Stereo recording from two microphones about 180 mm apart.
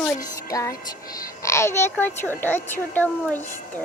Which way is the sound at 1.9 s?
10° left (ahead or behind).